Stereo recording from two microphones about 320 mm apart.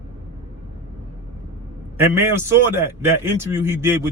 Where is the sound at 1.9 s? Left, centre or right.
Centre.